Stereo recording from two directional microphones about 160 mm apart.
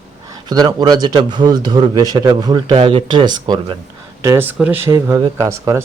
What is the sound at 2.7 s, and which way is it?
Speech, 35° right (ahead or behind).